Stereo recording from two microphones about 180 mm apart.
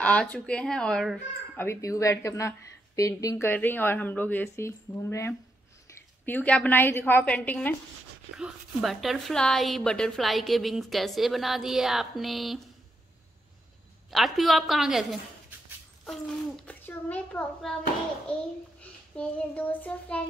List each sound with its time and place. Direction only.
0.0 s speech: 10° left (ahead or behind)
1.7 s a woman's voice: 15° left (ahead or behind)
8.4 s speech: centre (ahead or behind)
14.1 s speech: centre (ahead or behind)
18.8 s a child's voice: 10° left (ahead or behind)